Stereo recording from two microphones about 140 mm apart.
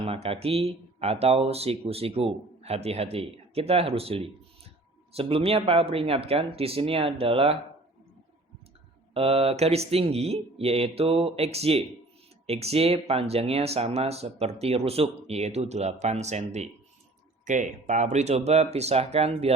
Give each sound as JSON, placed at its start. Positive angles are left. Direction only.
{"t": 0.0, "sound": "speech", "side_deg": -45}
{"t": 9.1, "sound": "speech", "side_deg": -40}